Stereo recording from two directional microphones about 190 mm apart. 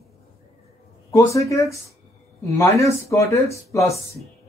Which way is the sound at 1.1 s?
15° left (ahead or behind).